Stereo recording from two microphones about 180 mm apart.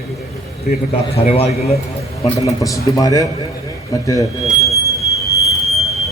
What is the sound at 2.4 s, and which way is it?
Speech, 20° left (ahead or behind).